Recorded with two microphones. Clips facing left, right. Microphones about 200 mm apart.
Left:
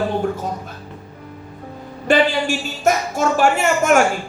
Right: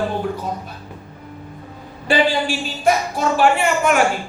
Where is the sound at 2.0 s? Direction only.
45° left (ahead or behind).